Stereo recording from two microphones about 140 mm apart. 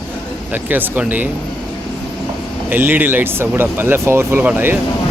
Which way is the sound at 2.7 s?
15° right (ahead or behind).